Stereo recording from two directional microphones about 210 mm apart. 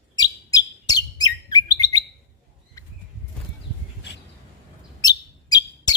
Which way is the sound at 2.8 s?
15° left (ahead or behind).